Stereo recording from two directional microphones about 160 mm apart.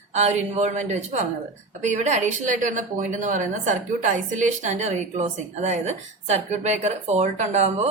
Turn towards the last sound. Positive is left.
turn(degrees=-45)  # may be behind; listen again after turning